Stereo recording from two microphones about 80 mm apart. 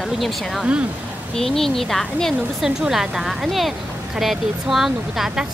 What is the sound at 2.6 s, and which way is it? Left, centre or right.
Speech, centre.